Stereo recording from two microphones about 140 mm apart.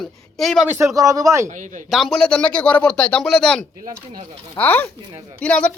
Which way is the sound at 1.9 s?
Centre (ahead or behind).